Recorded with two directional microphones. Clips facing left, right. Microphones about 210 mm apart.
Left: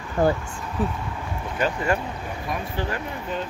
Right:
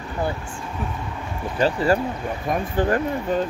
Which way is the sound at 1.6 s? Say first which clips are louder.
Right 5 dB; 35° right (ahead or behind).